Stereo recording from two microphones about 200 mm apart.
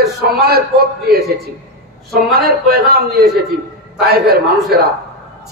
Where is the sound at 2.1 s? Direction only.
50° right (ahead or behind).